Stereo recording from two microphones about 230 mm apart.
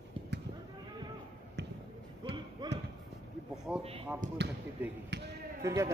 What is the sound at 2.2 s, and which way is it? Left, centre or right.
Basketball bounce, centre.